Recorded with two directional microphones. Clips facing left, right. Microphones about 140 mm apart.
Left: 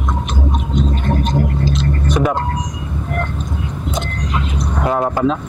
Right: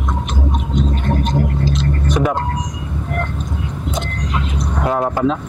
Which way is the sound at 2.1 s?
15° left (ahead or behind).